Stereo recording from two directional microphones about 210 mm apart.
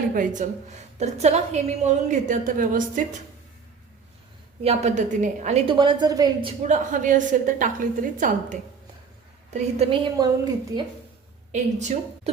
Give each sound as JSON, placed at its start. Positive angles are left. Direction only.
{"t": 0.1, "sound": "a woman's voice", "side_deg": -40}
{"t": 4.6, "sound": "a woman's voice", "side_deg": -30}
{"t": 5.7, "sound": "a woman's voice", "side_deg": -20}
{"t": 6.7, "sound": "a woman's voice", "side_deg": -35}
{"t": 9.5, "sound": "a woman's voice", "side_deg": -30}
{"t": 11.5, "sound": "a woman's voice", "side_deg": -35}